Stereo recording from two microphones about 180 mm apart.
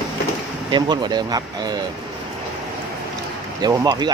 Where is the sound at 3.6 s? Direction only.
25° right (ahead or behind).